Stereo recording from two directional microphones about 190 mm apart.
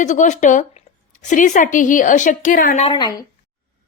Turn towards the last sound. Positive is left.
turn(degrees=25)  # may be behind; listen again after turning